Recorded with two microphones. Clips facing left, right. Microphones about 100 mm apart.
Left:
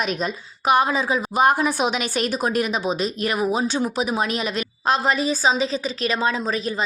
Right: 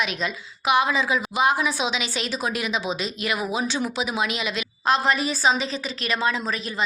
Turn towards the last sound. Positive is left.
turn(degrees=35)  # may be behind; listen again after turning